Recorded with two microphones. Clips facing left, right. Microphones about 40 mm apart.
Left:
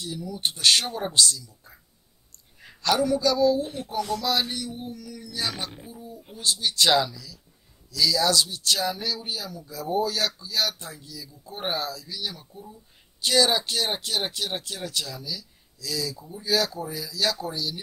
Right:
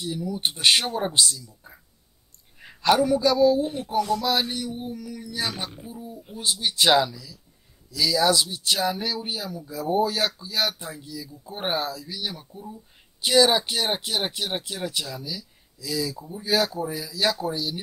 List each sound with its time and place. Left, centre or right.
0.0 s speech: centre
2.6 s a woman's voice: centre